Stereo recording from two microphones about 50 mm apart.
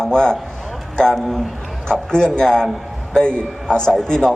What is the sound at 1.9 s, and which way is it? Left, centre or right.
A man's voice, centre.